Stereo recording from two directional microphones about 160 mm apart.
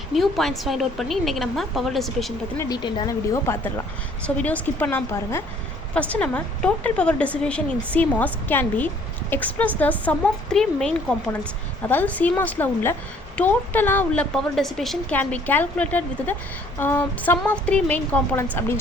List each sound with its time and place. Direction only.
0.1 s a woman's voice: centre (ahead or behind)
2.6 s a woman's voice: 25° left (ahead or behind)